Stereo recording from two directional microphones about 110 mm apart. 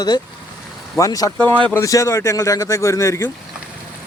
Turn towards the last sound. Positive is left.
turn(degrees=25)  # may be behind; listen again after turning